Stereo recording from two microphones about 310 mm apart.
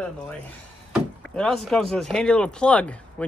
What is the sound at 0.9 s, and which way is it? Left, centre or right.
Speech, centre.